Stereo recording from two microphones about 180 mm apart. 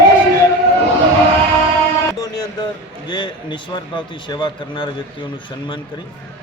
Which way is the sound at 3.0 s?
25° left (ahead or behind).